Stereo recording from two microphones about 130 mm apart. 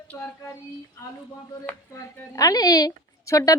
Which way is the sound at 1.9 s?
25° left (ahead or behind).